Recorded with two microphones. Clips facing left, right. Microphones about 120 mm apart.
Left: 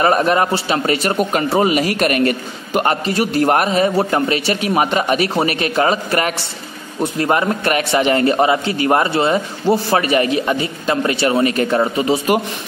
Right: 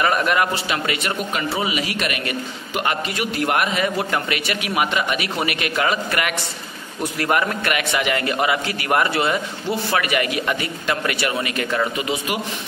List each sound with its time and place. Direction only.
0.0 s a man's voice: 35° left (ahead or behind)